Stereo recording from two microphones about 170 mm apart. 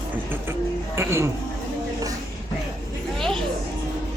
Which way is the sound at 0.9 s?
15° right (ahead or behind).